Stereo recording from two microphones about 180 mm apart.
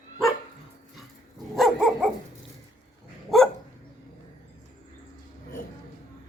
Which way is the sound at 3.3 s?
Centre (ahead or behind).